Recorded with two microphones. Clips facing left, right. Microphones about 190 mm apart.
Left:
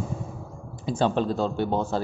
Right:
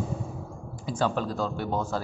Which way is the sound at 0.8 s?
25° left (ahead or behind).